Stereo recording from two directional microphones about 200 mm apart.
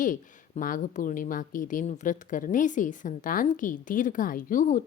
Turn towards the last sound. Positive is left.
turn(degrees=40)  # may be behind; listen again after turning